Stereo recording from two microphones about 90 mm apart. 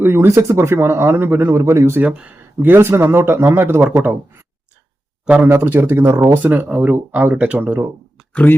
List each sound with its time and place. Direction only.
0.0 s speech: 30° right (ahead or behind)
2.0 s speech: 15° right (ahead or behind)
5.5 s speech: 25° right (ahead or behind)
6.1 s speech: 40° right (ahead or behind)
6.3 s speech: 20° right (ahead or behind)
8.3 s speech: 15° left (ahead or behind)